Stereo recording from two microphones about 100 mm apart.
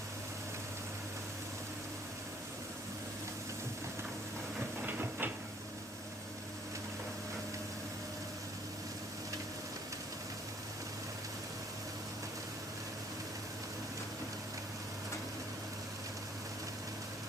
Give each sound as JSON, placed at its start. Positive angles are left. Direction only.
{"t": 4.8, "sound": "printer", "side_deg": -20}